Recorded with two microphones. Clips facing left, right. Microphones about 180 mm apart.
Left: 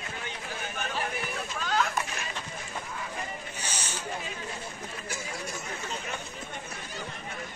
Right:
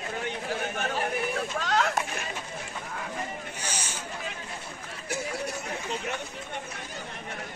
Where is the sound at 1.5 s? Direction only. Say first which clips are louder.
Right 1 dB; 75° right (ahead or behind).